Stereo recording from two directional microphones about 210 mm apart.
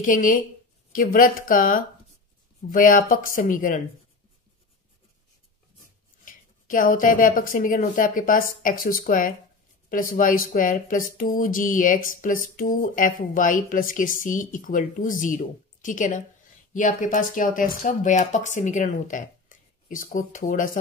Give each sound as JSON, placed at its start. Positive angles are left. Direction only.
{"t": 0.0, "sound": "speech", "side_deg": 40}
{"t": 6.2, "sound": "speech", "side_deg": 40}